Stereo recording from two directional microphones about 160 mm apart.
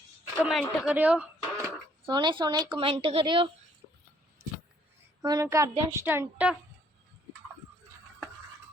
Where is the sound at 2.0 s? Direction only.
30° right (ahead or behind).